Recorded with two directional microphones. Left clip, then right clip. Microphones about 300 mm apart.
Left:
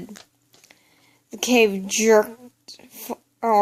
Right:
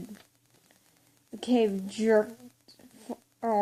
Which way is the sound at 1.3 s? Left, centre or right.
Left.